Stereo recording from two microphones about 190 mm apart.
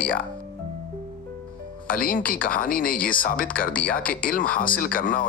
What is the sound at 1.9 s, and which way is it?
Speech, 45° left (ahead or behind).